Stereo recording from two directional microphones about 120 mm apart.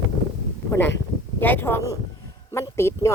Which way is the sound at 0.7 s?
15° left (ahead or behind).